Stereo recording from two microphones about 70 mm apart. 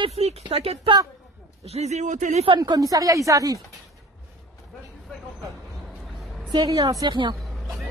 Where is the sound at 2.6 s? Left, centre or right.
Right.